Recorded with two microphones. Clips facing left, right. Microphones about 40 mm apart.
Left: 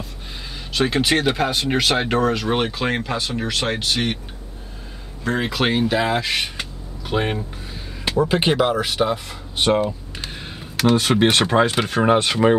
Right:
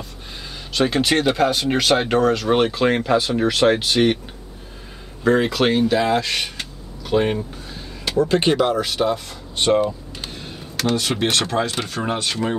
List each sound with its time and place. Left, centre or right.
0.7 s speech: centre
5.2 s speech: centre
11.0 s speech: left